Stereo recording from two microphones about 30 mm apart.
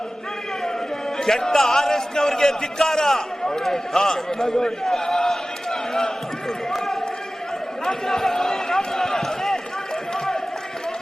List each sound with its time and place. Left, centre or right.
1.2 s a man's voice: centre
6.7 s run: centre